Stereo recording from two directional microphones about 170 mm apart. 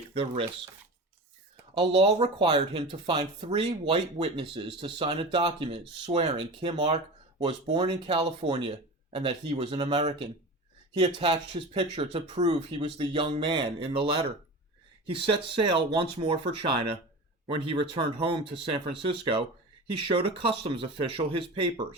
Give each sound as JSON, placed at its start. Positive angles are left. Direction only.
{"t": 0.1, "sound": "speech", "side_deg": -35}
{"t": 1.7, "sound": "speech", "side_deg": -30}